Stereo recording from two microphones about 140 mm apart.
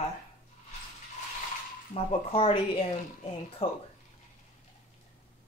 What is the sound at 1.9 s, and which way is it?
Speech, 40° left (ahead or behind).